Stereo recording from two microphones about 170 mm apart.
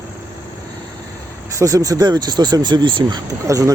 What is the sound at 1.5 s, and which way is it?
Speech, 20° right (ahead or behind).